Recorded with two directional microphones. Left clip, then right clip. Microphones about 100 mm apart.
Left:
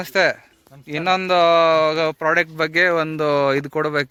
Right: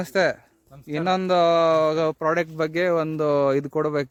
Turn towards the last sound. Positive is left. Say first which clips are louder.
# left 3 dB
turn(degrees=-30)  # may be behind; listen again after turning